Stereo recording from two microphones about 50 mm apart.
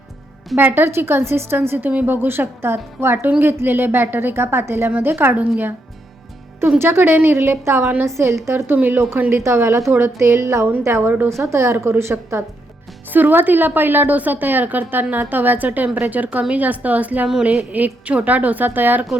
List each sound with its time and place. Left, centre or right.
0.6 s a woman's voice: right
1.8 s a woman's voice: right
2.2 s a woman's voice: right
5.3 s a woman's voice: right
6.7 s a woman's voice: right
8.0 s a woman's voice: right
8.6 s a woman's voice: right
9.3 s a woman's voice: right
11.3 s a woman's voice: right
13.1 s a woman's voice: right